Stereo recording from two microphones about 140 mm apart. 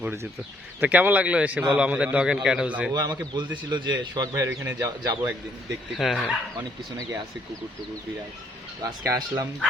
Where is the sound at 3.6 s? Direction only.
30° right (ahead or behind).